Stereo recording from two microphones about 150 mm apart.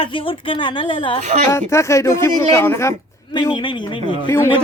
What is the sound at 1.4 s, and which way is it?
Speech, 20° left (ahead or behind).